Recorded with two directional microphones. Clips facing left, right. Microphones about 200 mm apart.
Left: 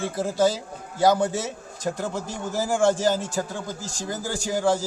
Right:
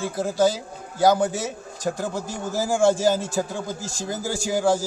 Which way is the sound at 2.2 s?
20° left (ahead or behind).